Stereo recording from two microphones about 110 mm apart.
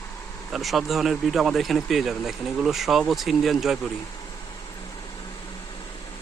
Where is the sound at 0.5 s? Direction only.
Centre (ahead or behind).